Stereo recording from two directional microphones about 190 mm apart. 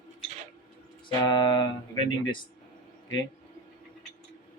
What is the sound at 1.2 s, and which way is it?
Speech, 25° left (ahead or behind).